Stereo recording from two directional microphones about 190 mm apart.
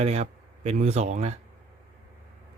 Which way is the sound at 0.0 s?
35° right (ahead or behind).